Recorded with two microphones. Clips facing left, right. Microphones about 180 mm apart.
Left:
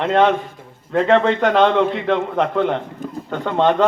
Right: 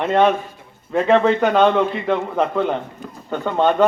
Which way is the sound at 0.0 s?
10° right (ahead or behind).